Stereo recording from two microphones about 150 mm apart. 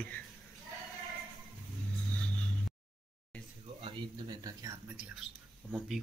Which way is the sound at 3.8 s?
25° right (ahead or behind).